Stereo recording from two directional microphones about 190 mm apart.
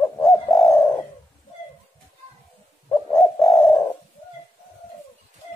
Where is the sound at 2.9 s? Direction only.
15° left (ahead or behind).